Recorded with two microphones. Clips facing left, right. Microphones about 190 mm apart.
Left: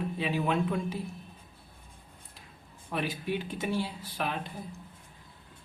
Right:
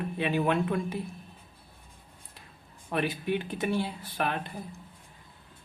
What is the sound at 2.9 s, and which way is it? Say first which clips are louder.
Speech: right 3 dB; 60° right (ahead or behind).